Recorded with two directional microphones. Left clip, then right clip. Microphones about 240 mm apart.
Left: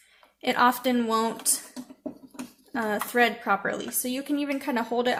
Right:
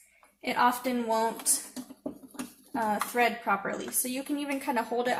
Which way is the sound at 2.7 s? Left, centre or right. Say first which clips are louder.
Left 3 dB; left.